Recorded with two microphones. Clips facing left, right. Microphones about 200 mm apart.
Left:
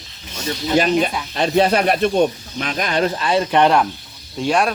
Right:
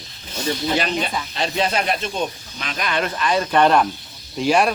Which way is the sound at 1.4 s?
55° left (ahead or behind).